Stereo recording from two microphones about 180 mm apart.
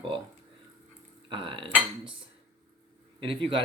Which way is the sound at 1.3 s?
30° right (ahead or behind).